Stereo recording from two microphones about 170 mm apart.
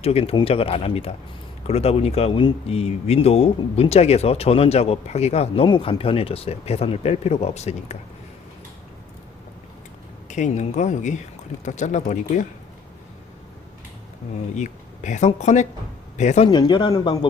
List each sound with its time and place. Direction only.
0.0 s speech: 35° left (ahead or behind)
10.2 s speech: 45° left (ahead or behind)
14.5 s speech: 45° left (ahead or behind)
16.5 s speech: 25° left (ahead or behind)